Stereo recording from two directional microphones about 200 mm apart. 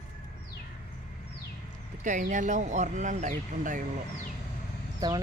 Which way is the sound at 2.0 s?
40° right (ahead or behind).